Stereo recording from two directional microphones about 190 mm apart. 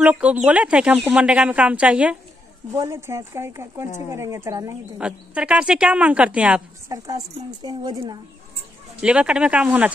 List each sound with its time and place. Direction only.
0.0 s a woman's voice: 5° right (ahead or behind)
6.9 s a woman's voice: 20° right (ahead or behind)
9.0 s a woman's voice: 5° right (ahead or behind)